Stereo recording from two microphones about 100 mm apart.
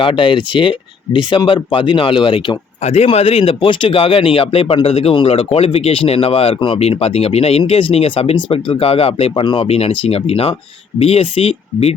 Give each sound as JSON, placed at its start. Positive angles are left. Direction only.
{"t": 0.0, "sound": "speech", "side_deg": 60}
{"t": 5.1, "sound": "speech", "side_deg": 70}
{"t": 9.4, "sound": "speech", "side_deg": 55}
{"t": 9.6, "sound": "speech", "side_deg": 75}